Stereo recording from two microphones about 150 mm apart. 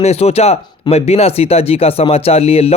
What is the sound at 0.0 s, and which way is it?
Speech, 45° left (ahead or behind).